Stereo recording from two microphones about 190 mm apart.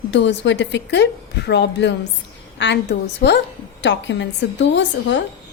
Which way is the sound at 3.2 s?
55° left (ahead or behind).